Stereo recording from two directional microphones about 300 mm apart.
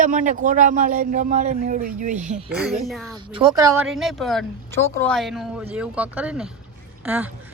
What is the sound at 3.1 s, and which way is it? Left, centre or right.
Speech, centre.